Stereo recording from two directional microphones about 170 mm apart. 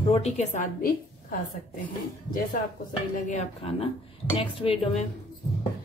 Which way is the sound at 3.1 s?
40° left (ahead or behind).